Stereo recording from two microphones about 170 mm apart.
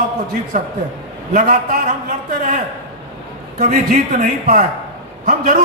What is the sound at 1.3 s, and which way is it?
Speech, 50° right (ahead or behind).